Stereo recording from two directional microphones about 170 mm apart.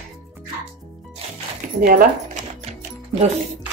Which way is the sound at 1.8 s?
50° right (ahead or behind).